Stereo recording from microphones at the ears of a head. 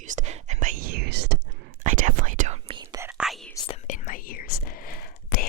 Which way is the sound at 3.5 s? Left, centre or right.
Left.